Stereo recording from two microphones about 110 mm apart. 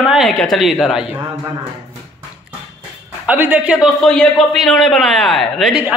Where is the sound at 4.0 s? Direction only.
5° left (ahead or behind).